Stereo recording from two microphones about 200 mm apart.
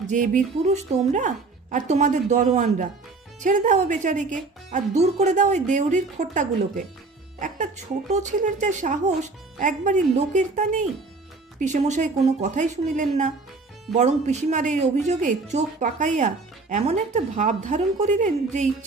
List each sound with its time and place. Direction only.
0.1 s speech: 40° right (ahead or behind)